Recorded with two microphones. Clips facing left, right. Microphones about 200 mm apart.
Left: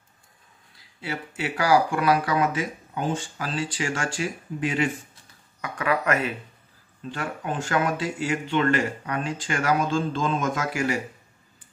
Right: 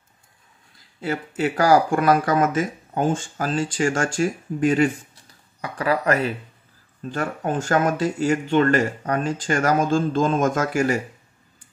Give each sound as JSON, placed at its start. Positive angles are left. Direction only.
{"t": 1.0, "sound": "speech", "side_deg": -45}
{"t": 5.6, "sound": "speech", "side_deg": -35}